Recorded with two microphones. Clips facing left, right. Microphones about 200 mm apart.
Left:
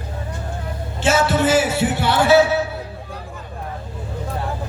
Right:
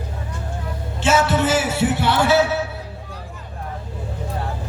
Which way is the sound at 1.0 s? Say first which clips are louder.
Left 1 dB; 35° left (ahead or behind).